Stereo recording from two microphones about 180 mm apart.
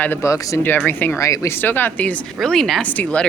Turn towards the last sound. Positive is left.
turn(degrees=10)  # may be behind; listen again after turning